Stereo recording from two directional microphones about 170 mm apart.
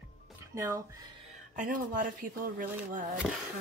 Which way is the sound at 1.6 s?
50° right (ahead or behind).